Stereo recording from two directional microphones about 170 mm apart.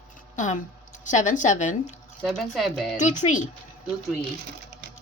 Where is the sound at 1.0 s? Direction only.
45° left (ahead or behind).